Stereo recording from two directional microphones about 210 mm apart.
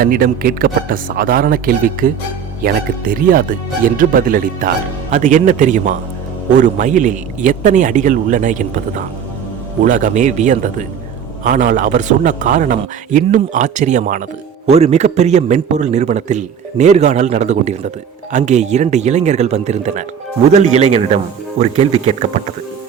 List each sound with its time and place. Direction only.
0.0 s a man's voice: 45° right (ahead or behind)
9.8 s a man's voice: 40° right (ahead or behind)